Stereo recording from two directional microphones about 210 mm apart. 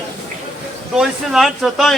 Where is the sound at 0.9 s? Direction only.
Centre (ahead or behind).